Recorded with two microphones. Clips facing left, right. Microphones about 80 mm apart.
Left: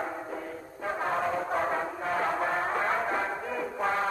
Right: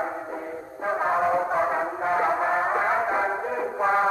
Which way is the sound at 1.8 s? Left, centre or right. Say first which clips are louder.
Right 6 dB; right.